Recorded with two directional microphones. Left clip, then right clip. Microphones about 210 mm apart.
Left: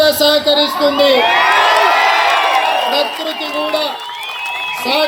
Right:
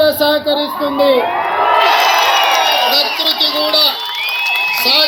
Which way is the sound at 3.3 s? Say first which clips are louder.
Right 7 dB; 40° left (ahead or behind).